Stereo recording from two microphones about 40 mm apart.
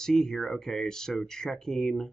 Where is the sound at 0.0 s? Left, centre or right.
Centre.